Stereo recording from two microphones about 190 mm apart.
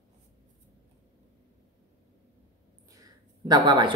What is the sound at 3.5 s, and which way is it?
Speech, 20° right (ahead or behind).